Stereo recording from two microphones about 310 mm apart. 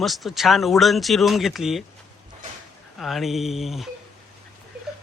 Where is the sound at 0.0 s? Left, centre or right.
Centre.